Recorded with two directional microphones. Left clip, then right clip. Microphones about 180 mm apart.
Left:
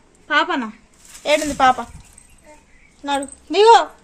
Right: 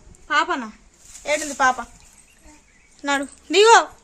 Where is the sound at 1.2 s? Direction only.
5° left (ahead or behind).